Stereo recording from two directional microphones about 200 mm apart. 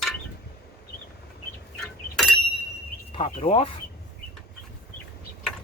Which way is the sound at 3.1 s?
30° left (ahead or behind).